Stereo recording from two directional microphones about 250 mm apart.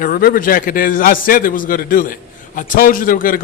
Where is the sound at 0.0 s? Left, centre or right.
Left.